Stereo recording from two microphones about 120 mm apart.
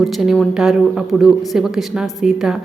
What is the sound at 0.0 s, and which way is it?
Speech, centre (ahead or behind).